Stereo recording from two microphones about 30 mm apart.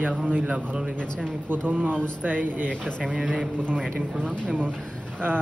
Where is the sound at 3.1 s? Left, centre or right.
Centre.